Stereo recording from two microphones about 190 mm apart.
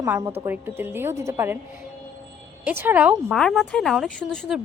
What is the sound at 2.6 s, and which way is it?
Speech, 10° right (ahead or behind).